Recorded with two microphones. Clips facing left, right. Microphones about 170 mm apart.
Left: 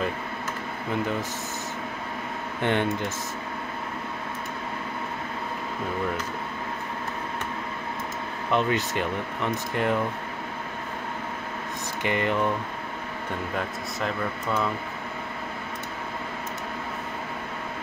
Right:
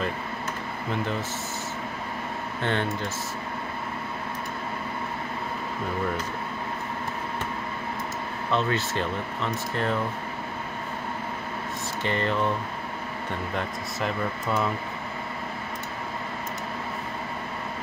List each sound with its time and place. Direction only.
2.6 s speech: 15° left (ahead or behind)
8.5 s speech: 15° left (ahead or behind)
12.0 s speech: 15° left (ahead or behind)
13.6 s speech: centre (ahead or behind)